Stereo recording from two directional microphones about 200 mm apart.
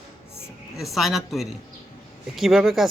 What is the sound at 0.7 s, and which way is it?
Speech, centre (ahead or behind).